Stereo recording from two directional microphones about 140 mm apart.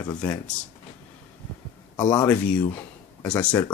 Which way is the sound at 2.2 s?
10° left (ahead or behind).